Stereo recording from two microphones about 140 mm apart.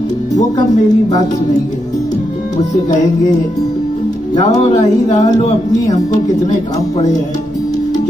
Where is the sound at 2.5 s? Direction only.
55° left (ahead or behind).